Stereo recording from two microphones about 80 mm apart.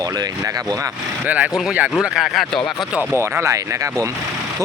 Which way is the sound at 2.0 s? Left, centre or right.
Centre.